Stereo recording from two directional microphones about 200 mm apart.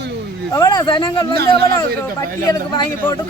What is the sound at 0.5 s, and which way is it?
Speech, 20° left (ahead or behind).